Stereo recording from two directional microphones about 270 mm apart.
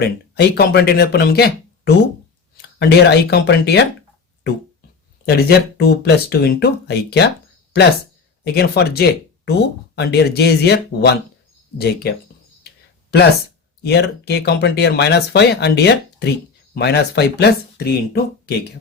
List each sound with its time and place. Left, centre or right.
0.0 s speech: left
2.6 s speech: left
5.2 s speech: left
8.5 s speech: left
13.8 s speech: left